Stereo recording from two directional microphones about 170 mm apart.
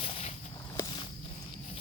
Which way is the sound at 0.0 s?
35° left (ahead or behind).